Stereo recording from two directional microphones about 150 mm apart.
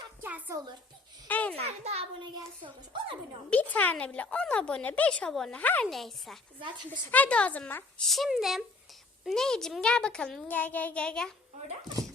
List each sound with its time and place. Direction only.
0.2 s a sound: 10° right (ahead or behind)
1.3 s speech: 10° left (ahead or behind)
1.6 s a child's voice: 45° right (ahead or behind)
3.5 s a child's voice: 10° left (ahead or behind)